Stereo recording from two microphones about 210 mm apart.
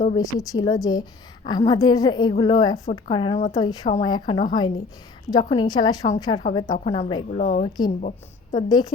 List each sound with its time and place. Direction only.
0.0 s a woman's voice: 20° left (ahead or behind); by 7.7 s 35° left (ahead or behind)
8.5 s a woman's voice: 20° left (ahead or behind)